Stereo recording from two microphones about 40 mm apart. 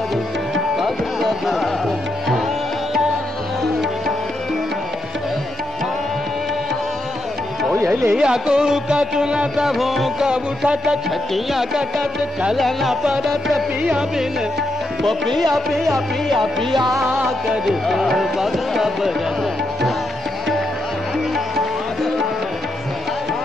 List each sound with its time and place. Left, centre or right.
1.2 s music: centre
7.7 s music: right
8.2 s music: centre
9.7 s music: centre
10.2 s music: centre
11.1 s music: centre
15.0 s music: centre